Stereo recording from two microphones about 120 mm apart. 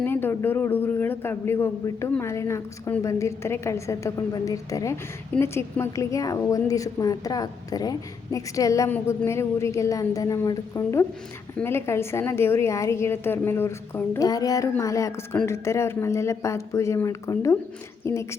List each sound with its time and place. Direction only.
0.0 s a woman's voice: 15° left (ahead or behind)
14.2 s a woman's voice: 30° left (ahead or behind)